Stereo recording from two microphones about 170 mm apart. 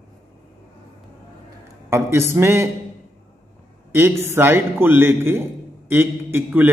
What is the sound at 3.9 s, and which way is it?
A man's voice, 15° right (ahead or behind).